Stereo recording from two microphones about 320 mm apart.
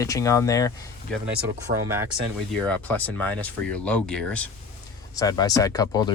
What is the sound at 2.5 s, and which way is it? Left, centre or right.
Speech, centre.